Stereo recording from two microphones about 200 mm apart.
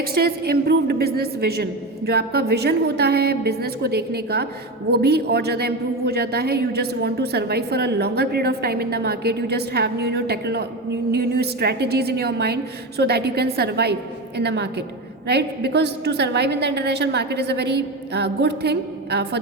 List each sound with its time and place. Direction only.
0.0 s a woman's voice: 50° right (ahead or behind)